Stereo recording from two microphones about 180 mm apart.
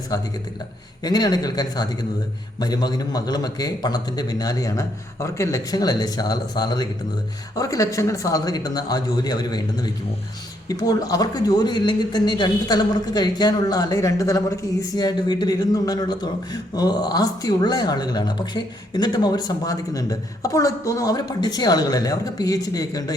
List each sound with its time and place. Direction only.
1.0 s a man's voice: 20° left (ahead or behind)